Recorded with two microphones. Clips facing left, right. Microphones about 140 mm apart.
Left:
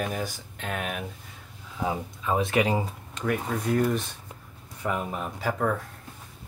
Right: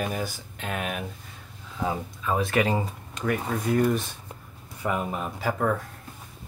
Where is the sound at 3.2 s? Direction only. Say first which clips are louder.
Right 1 dB; centre (ahead or behind).